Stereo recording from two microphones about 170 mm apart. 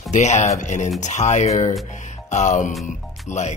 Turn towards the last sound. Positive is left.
turn(degrees=45)  # may be behind; listen again after turning